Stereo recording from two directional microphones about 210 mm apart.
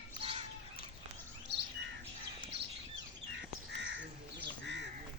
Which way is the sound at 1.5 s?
55° right (ahead or behind).